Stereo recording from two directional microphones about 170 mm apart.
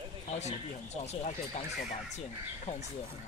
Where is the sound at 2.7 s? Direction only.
40° left (ahead or behind).